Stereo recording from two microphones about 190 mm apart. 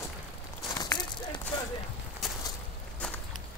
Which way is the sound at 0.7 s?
20° left (ahead or behind).